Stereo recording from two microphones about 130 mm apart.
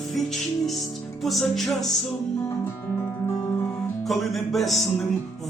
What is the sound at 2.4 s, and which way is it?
Music, 15° left (ahead or behind).